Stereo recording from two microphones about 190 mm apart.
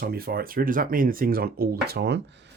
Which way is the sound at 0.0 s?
50° right (ahead or behind).